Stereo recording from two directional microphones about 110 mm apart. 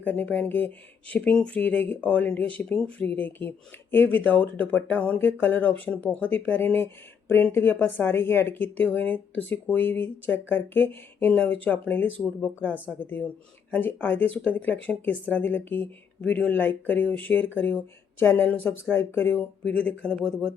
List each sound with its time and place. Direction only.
0.0 s speech: 15° left (ahead or behind)